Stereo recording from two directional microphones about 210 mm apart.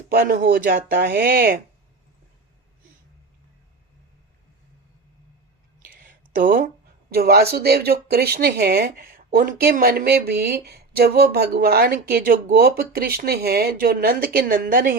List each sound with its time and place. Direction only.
0.1 s speech: 45° right (ahead or behind)
5.9 s a sound: 40° right (ahead or behind)
7.1 s speech: 50° right (ahead or behind)